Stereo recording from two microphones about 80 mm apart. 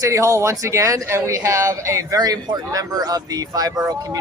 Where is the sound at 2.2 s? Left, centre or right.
Right.